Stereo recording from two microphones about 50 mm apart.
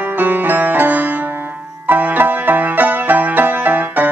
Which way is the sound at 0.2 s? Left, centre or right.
Right.